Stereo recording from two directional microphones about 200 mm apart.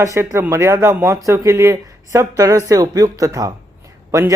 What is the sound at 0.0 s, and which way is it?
Speech, 15° right (ahead or behind).